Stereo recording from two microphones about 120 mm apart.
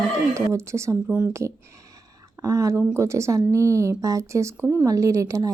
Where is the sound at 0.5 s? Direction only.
25° right (ahead or behind).